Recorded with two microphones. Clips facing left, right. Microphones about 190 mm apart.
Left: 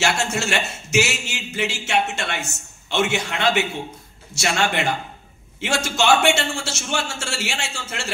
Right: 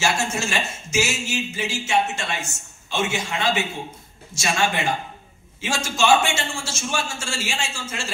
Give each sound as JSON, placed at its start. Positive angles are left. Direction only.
{"t": 0.0, "sound": "speech", "side_deg": 70}